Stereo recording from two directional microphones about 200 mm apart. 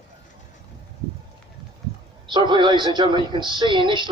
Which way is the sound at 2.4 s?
25° right (ahead or behind).